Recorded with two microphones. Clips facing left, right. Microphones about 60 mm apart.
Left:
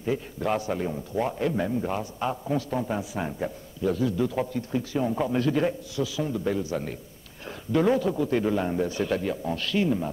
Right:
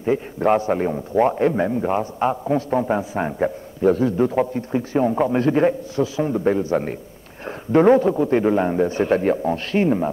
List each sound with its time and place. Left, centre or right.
0.0 s a man's voice: right